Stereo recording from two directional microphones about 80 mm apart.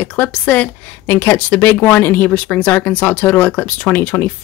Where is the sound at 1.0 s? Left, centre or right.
Left.